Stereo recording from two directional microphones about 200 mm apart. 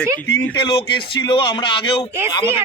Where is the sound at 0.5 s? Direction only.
25° left (ahead or behind).